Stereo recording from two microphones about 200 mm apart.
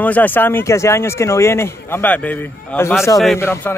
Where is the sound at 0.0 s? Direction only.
10° left (ahead or behind).